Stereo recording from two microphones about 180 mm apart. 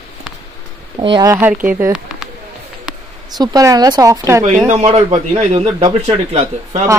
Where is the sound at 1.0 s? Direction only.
25° right (ahead or behind).